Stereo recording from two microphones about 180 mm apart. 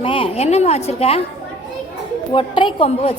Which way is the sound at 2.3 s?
30° left (ahead or behind).